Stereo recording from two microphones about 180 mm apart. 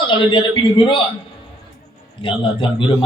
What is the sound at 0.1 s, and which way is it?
Speech, 25° left (ahead or behind).